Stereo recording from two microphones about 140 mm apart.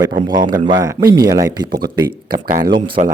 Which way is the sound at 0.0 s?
30° right (ahead or behind).